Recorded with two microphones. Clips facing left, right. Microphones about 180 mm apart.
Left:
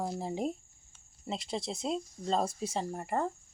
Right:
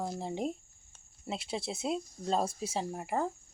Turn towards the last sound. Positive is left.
turn(degrees=0)  # may be behind; listen again after turning